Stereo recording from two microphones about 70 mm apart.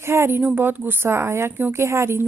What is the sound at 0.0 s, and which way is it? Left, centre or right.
A woman's voice, right.